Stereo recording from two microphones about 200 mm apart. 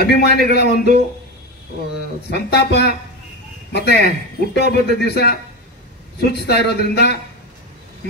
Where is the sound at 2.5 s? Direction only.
55° left (ahead or behind).